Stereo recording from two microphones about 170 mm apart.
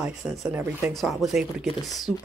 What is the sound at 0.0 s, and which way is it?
Speech, 5° right (ahead or behind).